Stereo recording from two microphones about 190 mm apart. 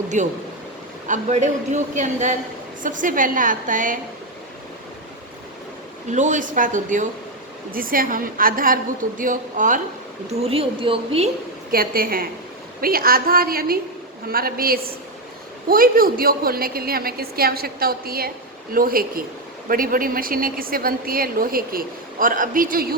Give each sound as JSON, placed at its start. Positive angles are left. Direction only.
{"t": 0.1, "sound": "a man's voice", "side_deg": -40}
{"t": 6.1, "sound": "a man's voice", "side_deg": -40}
{"t": 10.4, "sound": "a woman's voice", "side_deg": -30}
{"t": 11.7, "sound": "a woman's voice", "side_deg": -50}